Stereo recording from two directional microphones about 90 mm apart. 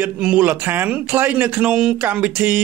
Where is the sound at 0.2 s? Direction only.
15° right (ahead or behind).